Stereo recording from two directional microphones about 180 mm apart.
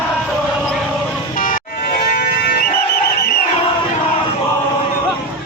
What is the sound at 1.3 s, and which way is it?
Music, 50° left (ahead or behind).